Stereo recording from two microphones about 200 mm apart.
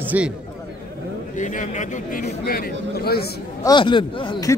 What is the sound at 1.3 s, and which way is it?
Speech, 40° left (ahead or behind).